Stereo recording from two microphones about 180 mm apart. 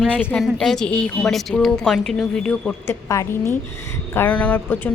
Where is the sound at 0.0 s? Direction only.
5° left (ahead or behind).